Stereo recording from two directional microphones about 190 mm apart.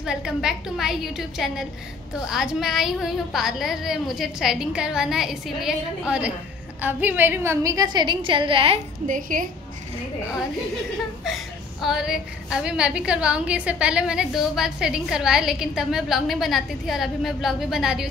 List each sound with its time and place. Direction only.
0.0 s a woman's voice: 5° right (ahead or behind); by 8.7 s 25° right (ahead or behind)
9.0 s a woman's voice: 45° right (ahead or behind)
11.3 s a sound: 5° right (ahead or behind)
11.8 s a woman's voice: centre (ahead or behind)